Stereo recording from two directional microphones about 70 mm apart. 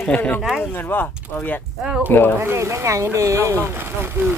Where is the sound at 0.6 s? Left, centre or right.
Left.